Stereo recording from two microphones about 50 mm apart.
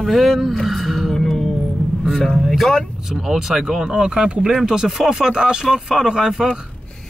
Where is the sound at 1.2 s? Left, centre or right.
Centre.